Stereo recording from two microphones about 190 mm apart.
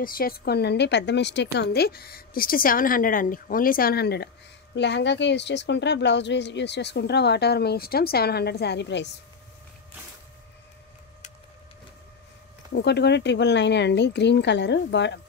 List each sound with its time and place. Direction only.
0.0 s a woman's voice: 50° left (ahead or behind); by 9.1 s 65° left (ahead or behind)
12.7 s speech: 60° left (ahead or behind)